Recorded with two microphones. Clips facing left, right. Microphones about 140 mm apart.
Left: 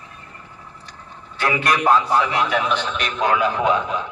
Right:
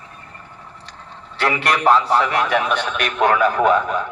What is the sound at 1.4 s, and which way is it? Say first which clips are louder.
A man's voice: right 1 dB; 35° right (ahead or behind).